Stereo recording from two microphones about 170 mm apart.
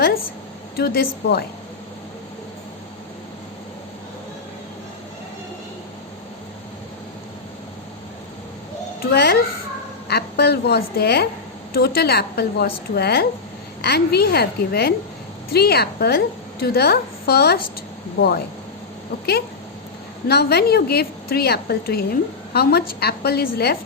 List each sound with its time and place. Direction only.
0.8 s a woman's voice: 65° left (ahead or behind)
9.0 s a woman's voice: 65° left (ahead or behind)
20.2 s a woman's voice: 70° left (ahead or behind)